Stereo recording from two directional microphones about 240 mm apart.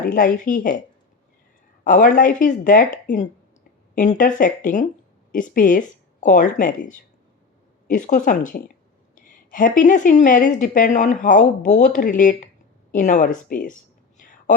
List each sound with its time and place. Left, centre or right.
0.0 s a woman's voice: left
1.8 s a woman's voice: left